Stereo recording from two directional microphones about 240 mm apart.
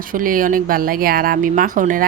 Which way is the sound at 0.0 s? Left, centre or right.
Right.